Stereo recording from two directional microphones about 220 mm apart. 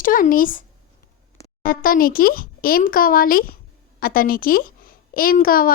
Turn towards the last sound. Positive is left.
turn(degrees=40)  # may be behind; listen again after turning